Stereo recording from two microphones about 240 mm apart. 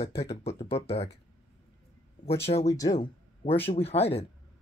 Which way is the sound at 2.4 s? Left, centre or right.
Left.